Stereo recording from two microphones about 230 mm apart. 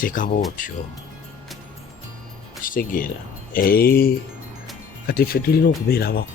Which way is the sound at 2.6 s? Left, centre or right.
Left.